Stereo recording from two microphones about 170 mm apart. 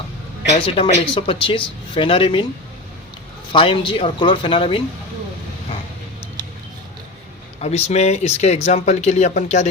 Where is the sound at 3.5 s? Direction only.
30° left (ahead or behind).